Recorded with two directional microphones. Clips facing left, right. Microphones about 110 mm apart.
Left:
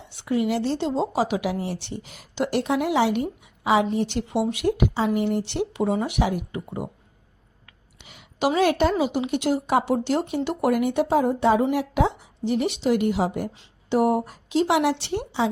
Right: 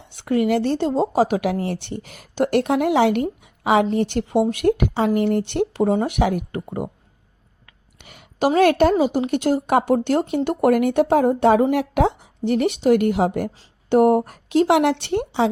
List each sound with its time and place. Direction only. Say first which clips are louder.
0.1 s a woman's voice: right 4 dB; 50° right (ahead or behind)
7.9 s a woman's voice: right 5 dB; 50° right (ahead or behind)